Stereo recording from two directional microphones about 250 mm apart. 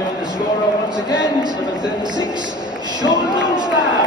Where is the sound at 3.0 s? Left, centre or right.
Centre.